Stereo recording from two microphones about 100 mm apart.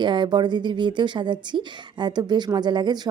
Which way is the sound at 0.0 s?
50° right (ahead or behind).